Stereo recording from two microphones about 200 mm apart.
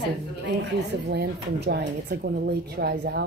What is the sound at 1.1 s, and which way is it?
A woman's voice, 55° right (ahead or behind).